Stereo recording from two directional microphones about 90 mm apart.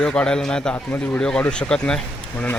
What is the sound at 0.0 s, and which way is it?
A man's voice, 10° left (ahead or behind).